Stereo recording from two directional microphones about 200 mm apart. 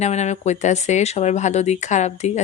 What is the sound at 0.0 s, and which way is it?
A woman's voice, 35° left (ahead or behind).